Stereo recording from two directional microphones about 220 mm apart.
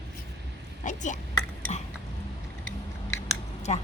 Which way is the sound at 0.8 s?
35° left (ahead or behind).